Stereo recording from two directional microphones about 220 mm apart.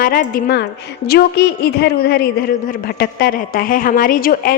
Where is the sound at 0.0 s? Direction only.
40° left (ahead or behind).